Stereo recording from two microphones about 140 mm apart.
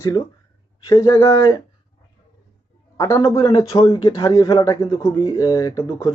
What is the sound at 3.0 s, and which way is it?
A man's voice, 20° left (ahead or behind).